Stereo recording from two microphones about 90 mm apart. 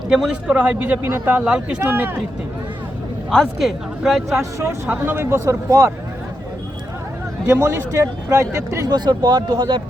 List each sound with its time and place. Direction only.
0.1 s a man's voice: 10° right (ahead or behind)
1.4 s a man's voice: 10° right (ahead or behind)
1.9 s speech: 20° right (ahead or behind)
3.2 s speech: centre (ahead or behind)
5.0 s speech: 25° right (ahead or behind)
7.4 s speech: 25° right (ahead or behind)
8.9 s speech: 55° right (ahead or behind)